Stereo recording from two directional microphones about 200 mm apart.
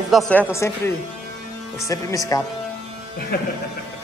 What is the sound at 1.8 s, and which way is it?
Speech, 15° left (ahead or behind).